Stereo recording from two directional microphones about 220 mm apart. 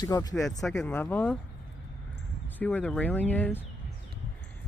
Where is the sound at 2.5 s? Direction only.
5° left (ahead or behind).